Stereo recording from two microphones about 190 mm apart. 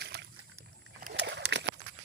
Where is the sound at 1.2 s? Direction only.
65° right (ahead or behind).